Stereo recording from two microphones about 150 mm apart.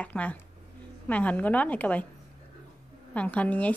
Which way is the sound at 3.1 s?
10° left (ahead or behind).